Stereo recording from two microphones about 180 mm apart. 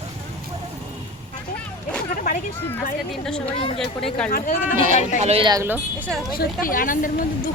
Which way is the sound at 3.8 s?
Centre (ahead or behind).